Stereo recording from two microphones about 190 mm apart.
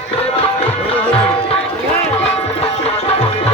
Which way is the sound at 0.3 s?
30° left (ahead or behind).